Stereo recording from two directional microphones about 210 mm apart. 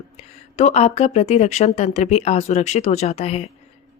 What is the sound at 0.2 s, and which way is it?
A woman's voice, 30° left (ahead or behind).